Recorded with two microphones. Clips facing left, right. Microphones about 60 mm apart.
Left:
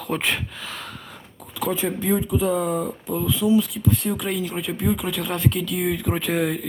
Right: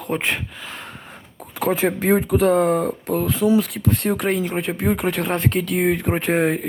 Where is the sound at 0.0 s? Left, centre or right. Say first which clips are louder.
Right 1 dB; right.